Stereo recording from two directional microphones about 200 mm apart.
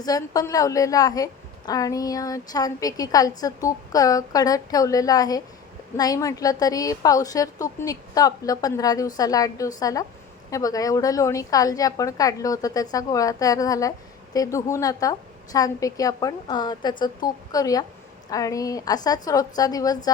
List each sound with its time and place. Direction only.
0.0 s a woman's voice: 20° left (ahead or behind)